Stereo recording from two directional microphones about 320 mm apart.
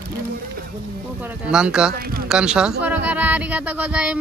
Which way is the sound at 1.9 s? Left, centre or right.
Right.